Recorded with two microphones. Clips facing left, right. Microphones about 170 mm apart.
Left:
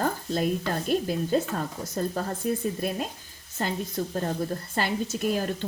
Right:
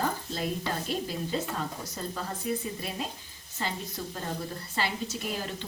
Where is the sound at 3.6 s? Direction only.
45° left (ahead or behind).